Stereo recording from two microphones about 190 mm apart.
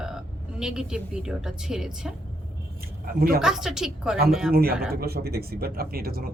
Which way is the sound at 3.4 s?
5° right (ahead or behind).